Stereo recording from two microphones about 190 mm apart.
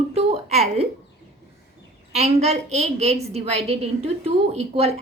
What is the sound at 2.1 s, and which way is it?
A woman's voice, 35° right (ahead or behind).